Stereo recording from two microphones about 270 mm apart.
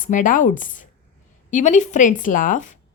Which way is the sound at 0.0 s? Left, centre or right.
Left.